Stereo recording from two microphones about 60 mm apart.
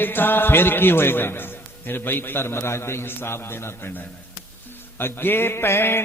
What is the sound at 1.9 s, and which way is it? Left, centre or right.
A man's voice, left.